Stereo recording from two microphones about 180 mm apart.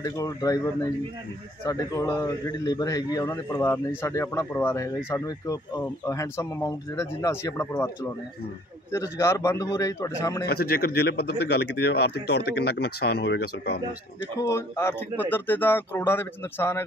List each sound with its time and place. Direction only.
0.0 s a man's voice: 20° left (ahead or behind)
1.6 s a man's voice: 15° left (ahead or behind)
10.5 s speech: 60° left (ahead or behind)
14.4 s a man's voice: 15° left (ahead or behind)